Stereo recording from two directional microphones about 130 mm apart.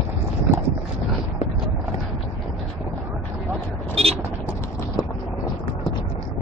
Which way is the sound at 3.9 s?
50° right (ahead or behind).